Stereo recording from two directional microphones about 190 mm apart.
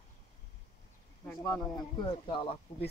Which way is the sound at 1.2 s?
15° left (ahead or behind).